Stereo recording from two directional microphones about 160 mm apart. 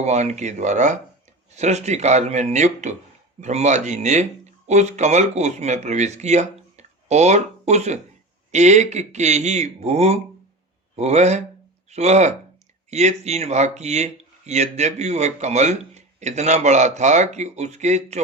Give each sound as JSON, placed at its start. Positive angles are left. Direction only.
{"t": 0.0, "sound": "speech", "side_deg": -45}